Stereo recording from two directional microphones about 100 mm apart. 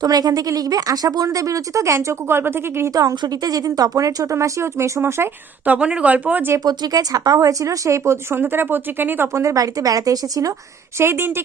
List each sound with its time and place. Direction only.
0.0 s speech: 40° right (ahead or behind); by 2.9 s 25° right (ahead or behind)
2.9 s speech: 35° right (ahead or behind)
5.7 s speech: 10° right (ahead or behind)
6.7 s speech: 40° right (ahead or behind)
10.9 s speech: 25° right (ahead or behind)